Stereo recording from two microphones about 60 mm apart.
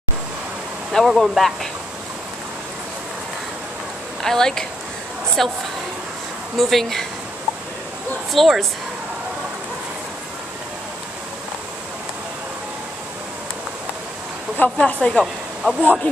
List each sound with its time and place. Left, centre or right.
0.9 s speech: centre
4.2 s a woman's voice: centre
8.3 s speech: centre
14.8 s a woman's voice: centre
15.1 s speech: centre
15.8 s speech: left